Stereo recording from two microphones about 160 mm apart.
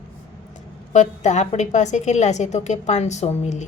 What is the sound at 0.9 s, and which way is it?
A woman's voice, 50° left (ahead or behind).